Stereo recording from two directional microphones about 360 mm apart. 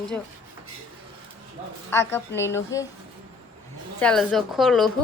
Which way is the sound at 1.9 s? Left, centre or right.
Centre.